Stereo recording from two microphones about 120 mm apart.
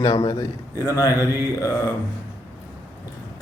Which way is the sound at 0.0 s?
40° left (ahead or behind).